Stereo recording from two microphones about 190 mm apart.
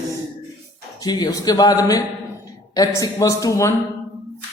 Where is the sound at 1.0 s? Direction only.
20° left (ahead or behind).